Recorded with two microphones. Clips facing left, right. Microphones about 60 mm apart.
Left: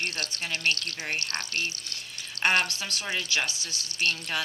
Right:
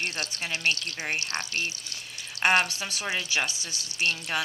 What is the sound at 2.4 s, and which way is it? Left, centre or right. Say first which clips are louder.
Speech: right 2 dB; centre.